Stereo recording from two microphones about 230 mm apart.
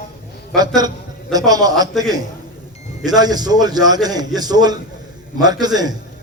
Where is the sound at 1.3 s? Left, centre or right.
Centre.